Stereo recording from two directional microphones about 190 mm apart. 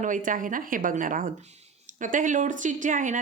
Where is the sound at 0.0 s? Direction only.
45° right (ahead or behind).